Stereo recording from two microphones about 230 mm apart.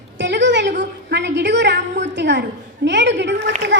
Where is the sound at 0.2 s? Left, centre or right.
Right.